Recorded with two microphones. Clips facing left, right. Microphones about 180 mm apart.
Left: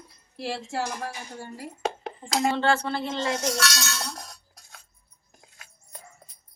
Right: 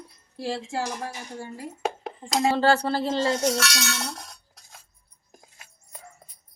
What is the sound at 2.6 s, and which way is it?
Speech, 35° right (ahead or behind).